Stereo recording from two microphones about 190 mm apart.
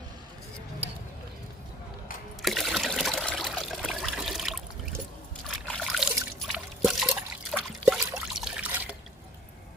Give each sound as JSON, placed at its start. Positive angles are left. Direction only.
{"t": 2.4, "sound": "trickle", "side_deg": 0}